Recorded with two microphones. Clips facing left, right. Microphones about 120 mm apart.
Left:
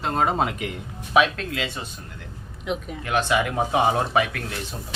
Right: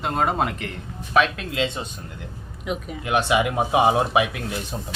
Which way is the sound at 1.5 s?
20° right (ahead or behind).